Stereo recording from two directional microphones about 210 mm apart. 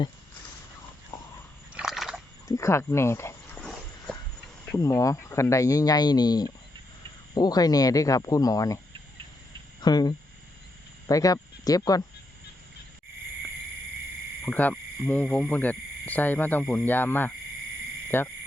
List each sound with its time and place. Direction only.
1.1 s dog: 15° left (ahead or behind)
1.7 s a sound: centre (ahead or behind)
2.5 s a sound: 15° left (ahead or behind)
4.6 s speech: 10° left (ahead or behind)
9.8 s speech: 20° left (ahead or behind)
14.4 s speech: 10° left (ahead or behind)